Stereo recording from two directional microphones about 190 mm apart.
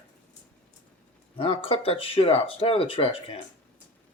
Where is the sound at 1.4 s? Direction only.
30° left (ahead or behind).